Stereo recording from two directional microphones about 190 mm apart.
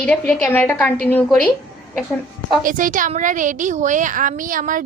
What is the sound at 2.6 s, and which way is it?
A woman's voice, 45° right (ahead or behind).